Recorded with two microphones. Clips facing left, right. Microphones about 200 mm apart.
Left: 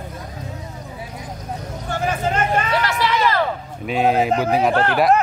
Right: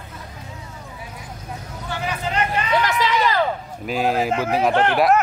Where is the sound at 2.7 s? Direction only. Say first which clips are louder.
Even; 20° right (ahead or behind).